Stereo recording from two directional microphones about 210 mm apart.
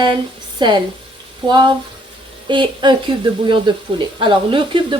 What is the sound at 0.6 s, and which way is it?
Speech, 20° right (ahead or behind).